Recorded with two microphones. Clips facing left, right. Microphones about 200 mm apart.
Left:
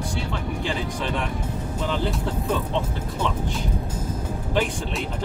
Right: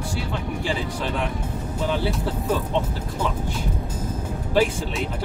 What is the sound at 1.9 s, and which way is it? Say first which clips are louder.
Speech: even; 5° right (ahead or behind).